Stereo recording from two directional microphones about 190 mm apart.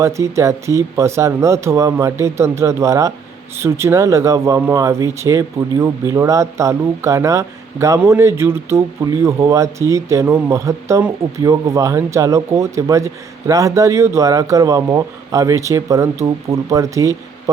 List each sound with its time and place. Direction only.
0.0 s speech: 15° right (ahead or behind)